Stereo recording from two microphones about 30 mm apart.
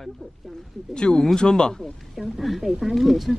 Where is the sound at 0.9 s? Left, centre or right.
Left.